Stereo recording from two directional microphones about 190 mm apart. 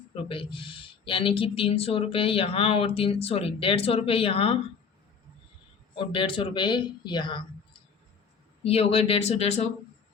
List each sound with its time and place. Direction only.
0.3 s speech: 25° left (ahead or behind)
6.0 s speech: 25° left (ahead or behind)
8.6 s speech: 30° left (ahead or behind)